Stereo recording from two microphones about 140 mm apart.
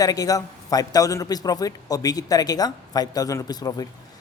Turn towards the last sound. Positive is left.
turn(degrees=25)  # may be behind; listen again after turning